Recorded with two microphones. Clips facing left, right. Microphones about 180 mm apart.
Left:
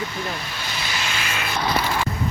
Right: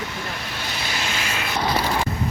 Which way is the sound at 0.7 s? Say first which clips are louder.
Even; 50° right (ahead or behind).